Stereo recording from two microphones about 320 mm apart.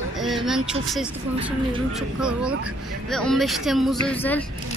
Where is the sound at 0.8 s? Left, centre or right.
Centre.